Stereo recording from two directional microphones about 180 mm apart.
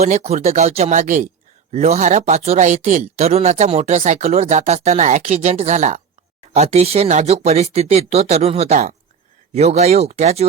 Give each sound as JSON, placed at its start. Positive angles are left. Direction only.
{"t": 0.0, "sound": "speech", "side_deg": -40}